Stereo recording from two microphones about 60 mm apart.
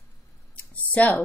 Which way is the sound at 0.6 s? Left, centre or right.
Left.